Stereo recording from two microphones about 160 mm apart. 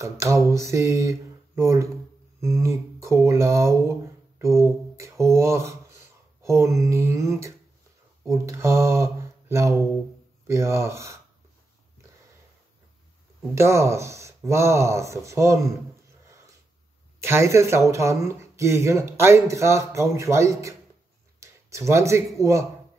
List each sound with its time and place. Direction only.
0.0 s speech: 20° right (ahead or behind)
13.6 s speech: 15° right (ahead or behind)
17.2 s speech: 15° right (ahead or behind)